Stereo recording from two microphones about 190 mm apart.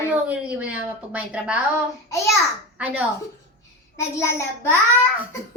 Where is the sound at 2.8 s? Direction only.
5° right (ahead or behind).